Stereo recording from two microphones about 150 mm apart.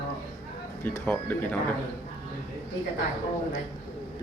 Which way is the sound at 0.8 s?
10° left (ahead or behind).